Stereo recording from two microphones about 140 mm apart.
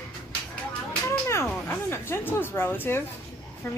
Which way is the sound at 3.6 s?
15° left (ahead or behind).